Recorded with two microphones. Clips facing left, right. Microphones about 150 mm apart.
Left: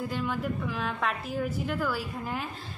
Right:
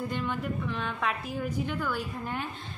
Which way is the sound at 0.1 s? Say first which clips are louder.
Left 1 dB; 5° left (ahead or behind).